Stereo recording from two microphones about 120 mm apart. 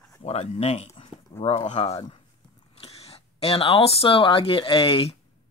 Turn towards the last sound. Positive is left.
turn(degrees=50)  # may be behind; listen again after turning